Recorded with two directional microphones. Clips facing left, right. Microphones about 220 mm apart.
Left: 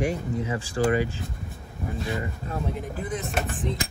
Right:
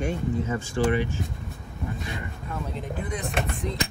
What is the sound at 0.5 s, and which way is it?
Speech, 35° left (ahead or behind).